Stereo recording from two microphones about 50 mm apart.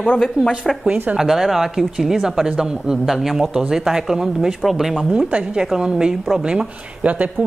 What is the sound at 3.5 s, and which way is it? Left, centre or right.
A woman's voice, centre.